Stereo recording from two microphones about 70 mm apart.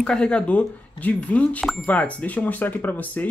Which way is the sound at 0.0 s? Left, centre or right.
Centre.